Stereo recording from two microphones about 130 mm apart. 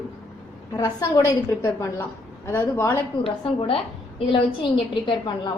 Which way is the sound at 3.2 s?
45° left (ahead or behind).